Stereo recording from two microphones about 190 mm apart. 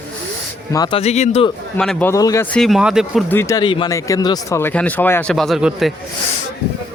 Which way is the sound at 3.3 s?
15° left (ahead or behind).